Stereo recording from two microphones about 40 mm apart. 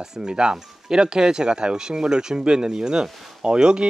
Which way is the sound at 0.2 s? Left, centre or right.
Right.